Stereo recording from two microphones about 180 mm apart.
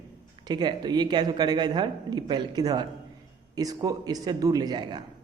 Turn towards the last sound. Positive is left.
turn(degrees=-25)  # may be behind; listen again after turning